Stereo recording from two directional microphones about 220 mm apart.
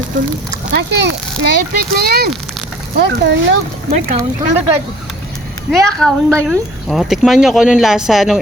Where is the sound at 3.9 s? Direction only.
30° right (ahead or behind).